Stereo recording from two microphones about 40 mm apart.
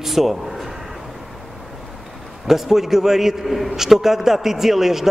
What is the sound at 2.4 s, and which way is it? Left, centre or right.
A man's voice, centre.